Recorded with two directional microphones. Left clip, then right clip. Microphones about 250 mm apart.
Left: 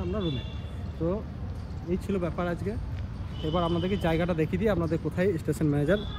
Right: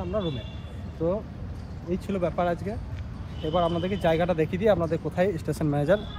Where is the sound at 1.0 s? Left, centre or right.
Centre.